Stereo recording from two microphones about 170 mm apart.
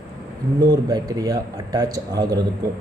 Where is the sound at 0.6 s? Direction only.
25° right (ahead or behind).